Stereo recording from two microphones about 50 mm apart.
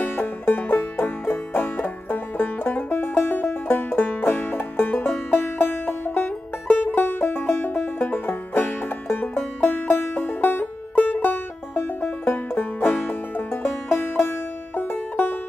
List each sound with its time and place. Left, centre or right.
0.0 s banjo: left
5.4 s music: left
9.0 s music: left
9.6 s music: left